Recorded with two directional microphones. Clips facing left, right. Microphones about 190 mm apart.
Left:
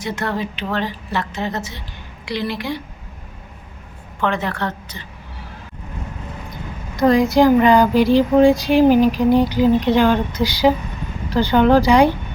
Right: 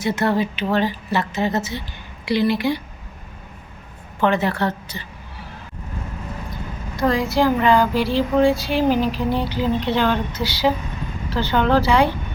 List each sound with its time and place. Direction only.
0.0 s a woman's voice: 5° right (ahead or behind)
4.2 s a woman's voice: 5° right (ahead or behind)
6.9 s speech: 20° left (ahead or behind)